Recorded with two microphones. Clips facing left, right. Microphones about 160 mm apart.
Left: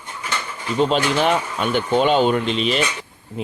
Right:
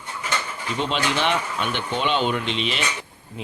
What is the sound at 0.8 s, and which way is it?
Speech, 40° left (ahead or behind).